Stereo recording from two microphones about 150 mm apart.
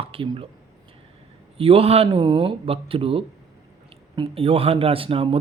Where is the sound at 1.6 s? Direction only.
40° right (ahead or behind).